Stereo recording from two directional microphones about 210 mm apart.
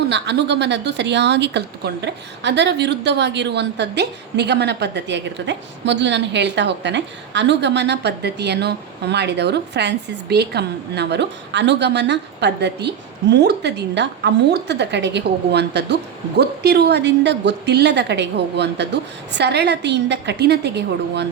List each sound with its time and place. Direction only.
0.1 s a woman's voice: 55° right (ahead or behind)